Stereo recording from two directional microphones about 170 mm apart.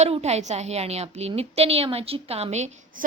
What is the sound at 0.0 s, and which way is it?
A woman's voice, 40° right (ahead or behind).